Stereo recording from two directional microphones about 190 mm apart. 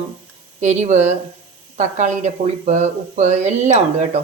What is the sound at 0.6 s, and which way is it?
Speech, 35° right (ahead or behind).